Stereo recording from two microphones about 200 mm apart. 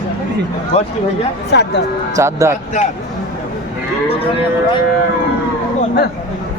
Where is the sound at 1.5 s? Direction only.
60° left (ahead or behind).